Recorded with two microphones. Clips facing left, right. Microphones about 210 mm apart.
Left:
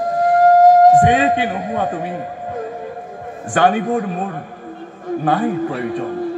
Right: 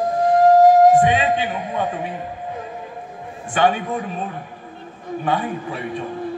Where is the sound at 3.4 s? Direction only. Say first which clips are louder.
Left 3 dB; 45° left (ahead or behind).